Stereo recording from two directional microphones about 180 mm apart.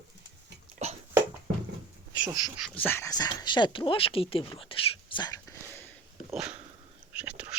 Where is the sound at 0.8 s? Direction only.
35° right (ahead or behind).